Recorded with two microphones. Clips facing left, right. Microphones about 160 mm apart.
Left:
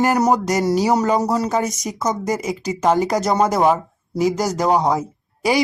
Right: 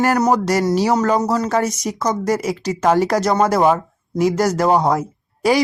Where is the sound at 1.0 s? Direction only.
20° left (ahead or behind).